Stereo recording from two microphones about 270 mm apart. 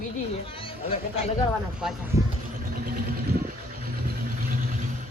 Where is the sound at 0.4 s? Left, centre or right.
Centre.